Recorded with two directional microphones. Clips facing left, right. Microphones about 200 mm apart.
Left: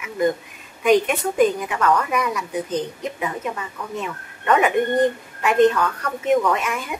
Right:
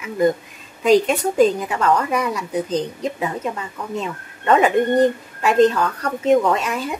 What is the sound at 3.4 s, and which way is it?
A woman's voice, 30° right (ahead or behind).